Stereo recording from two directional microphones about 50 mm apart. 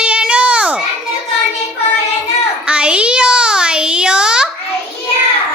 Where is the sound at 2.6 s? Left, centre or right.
Right.